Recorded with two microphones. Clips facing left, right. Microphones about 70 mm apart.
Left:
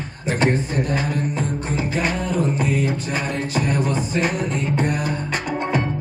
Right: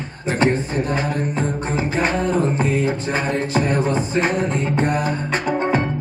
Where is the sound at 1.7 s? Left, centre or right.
Right.